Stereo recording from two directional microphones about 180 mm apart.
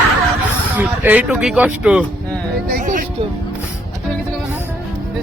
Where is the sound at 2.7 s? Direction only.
50° right (ahead or behind).